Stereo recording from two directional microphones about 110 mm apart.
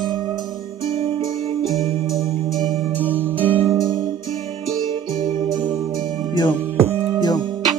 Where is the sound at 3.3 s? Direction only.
15° left (ahead or behind).